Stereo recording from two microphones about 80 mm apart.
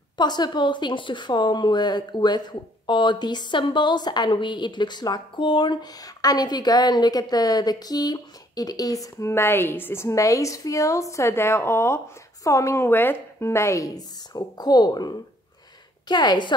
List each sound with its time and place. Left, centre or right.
0.2 s speech: left
5.9 s a woman's voice: left
10.0 s a woman's voice: left
13.9 s speech: left